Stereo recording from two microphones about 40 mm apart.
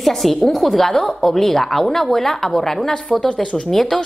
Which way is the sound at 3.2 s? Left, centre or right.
Left.